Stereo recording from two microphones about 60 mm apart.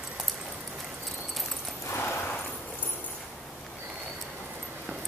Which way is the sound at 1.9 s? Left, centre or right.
Left.